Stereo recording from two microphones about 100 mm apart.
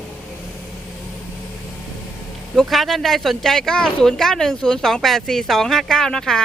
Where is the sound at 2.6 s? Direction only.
Centre (ahead or behind).